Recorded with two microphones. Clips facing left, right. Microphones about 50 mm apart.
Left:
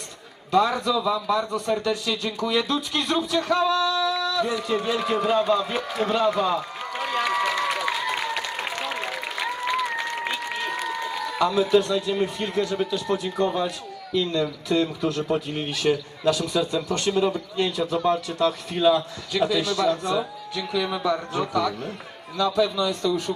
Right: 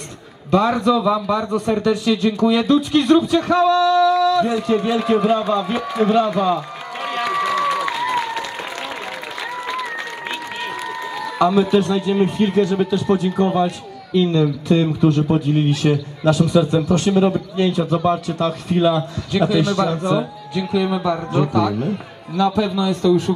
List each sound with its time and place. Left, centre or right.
0.5 s a man's voice: right
3.7 s a sound: right
4.4 s a man's voice: right; by 6.1 s centre
6.3 s run: centre
7.7 s applause: centre
9.7 s a sound: centre
10.6 s run: centre
11.5 s speech: centre
11.8 s a man's voice: right